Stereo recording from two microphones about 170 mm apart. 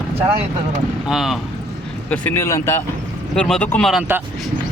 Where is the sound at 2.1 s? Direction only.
10° left (ahead or behind).